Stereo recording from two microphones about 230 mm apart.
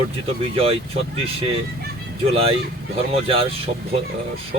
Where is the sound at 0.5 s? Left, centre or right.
Right.